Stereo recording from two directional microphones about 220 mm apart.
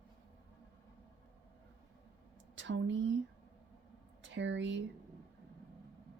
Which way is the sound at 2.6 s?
60° right (ahead or behind).